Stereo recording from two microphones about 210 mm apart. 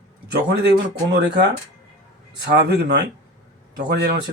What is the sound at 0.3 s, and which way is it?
Speech, 50° right (ahead or behind).